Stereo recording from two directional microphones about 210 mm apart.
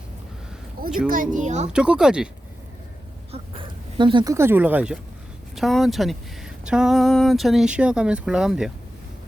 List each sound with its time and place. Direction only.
1.0 s speech: 40° right (ahead or behind)
1.7 s speech: 5° right (ahead or behind)
3.3 s speech: 25° right (ahead or behind); by 8.7 s 5° right (ahead or behind)